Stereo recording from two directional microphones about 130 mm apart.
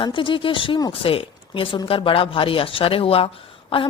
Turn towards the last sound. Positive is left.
turn(degrees=45)  # may be behind; listen again after turning